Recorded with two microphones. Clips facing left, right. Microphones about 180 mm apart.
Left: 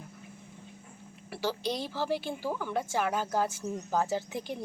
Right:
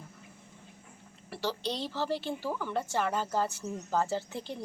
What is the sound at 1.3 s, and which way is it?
A woman's voice, 10° left (ahead or behind).